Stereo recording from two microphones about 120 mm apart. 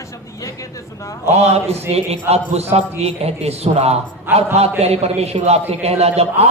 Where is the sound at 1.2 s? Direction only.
60° right (ahead or behind).